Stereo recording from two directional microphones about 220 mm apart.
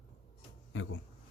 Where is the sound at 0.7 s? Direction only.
60° left (ahead or behind).